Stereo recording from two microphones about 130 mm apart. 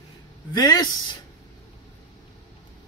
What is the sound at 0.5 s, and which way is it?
Speech, 30° left (ahead or behind).